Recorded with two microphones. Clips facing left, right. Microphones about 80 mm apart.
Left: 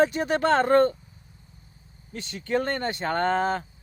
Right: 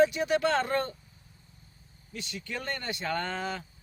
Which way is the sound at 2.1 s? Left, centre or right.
Left.